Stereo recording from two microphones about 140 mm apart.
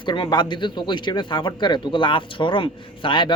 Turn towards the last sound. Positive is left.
turn(degrees=35)  # may be behind; listen again after turning